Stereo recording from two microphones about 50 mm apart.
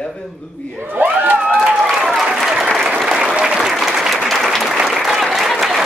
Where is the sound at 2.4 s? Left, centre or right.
Centre.